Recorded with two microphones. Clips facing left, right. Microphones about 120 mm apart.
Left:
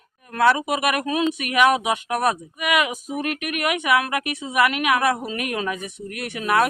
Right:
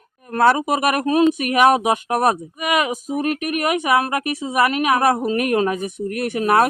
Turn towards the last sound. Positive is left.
turn(degrees=-40)  # may be behind; listen again after turning